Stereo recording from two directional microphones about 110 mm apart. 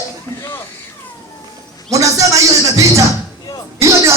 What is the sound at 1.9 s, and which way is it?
Speech, 30° right (ahead or behind).